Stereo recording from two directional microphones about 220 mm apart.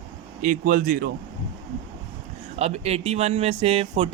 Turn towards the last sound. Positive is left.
turn(degrees=-25)  # may be behind; listen again after turning